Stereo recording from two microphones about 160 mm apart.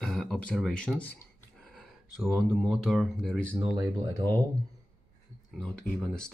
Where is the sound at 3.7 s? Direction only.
25° right (ahead or behind).